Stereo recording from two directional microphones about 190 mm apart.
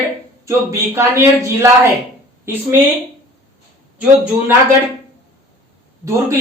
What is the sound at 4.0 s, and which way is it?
Speech, 5° right (ahead or behind).